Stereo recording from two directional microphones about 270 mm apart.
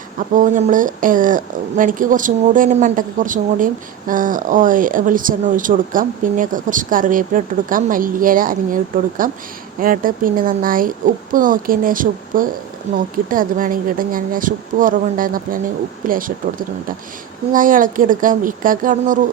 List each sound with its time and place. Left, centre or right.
0.3 s speech: right